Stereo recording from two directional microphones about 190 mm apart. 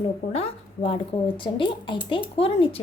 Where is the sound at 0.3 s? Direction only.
30° left (ahead or behind).